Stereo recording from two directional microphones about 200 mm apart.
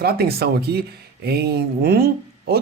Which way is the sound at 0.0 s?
50° right (ahead or behind).